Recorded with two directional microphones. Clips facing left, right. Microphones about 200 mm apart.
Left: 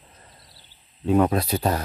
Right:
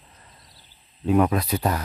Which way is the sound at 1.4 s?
30° left (ahead or behind).